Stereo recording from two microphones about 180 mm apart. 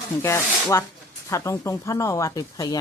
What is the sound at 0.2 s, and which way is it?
Speech, 15° left (ahead or behind).